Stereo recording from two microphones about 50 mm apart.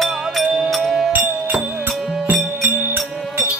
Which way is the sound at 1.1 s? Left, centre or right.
Right.